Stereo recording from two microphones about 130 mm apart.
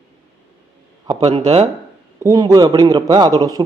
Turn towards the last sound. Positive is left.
turn(degrees=-30)  # may be behind; listen again after turning